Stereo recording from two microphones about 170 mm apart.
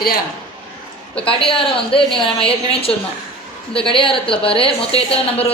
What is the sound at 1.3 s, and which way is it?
A woman's voice, 30° left (ahead or behind).